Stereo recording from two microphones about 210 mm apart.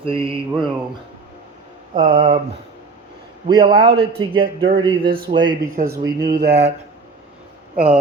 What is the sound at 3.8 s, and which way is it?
Mantra, 25° right (ahead or behind).